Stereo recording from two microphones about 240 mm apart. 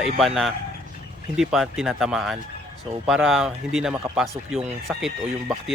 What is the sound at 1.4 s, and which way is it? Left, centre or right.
Speech, centre.